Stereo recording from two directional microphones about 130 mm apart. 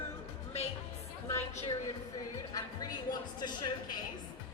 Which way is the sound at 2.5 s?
30° left (ahead or behind).